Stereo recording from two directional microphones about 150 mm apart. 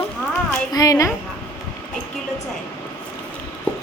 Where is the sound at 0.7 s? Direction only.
25° left (ahead or behind).